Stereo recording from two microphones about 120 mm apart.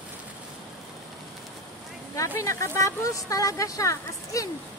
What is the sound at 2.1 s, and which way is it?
Speech, 25° left (ahead or behind).